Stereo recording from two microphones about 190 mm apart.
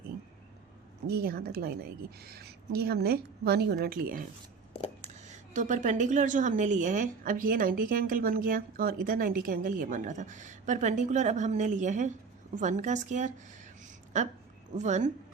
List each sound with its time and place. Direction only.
1.0 s a woman's voice: 55° right (ahead or behind)
4.7 s a sound: 30° left (ahead or behind)
5.3 s a woman's voice: 40° right (ahead or behind)
14.8 s a woman's voice: 40° right (ahead or behind)